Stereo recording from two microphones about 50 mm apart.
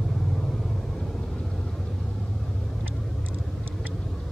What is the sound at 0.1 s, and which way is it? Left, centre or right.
Vehicle, centre.